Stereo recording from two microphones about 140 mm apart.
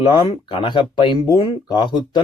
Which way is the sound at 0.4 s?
35° left (ahead or behind).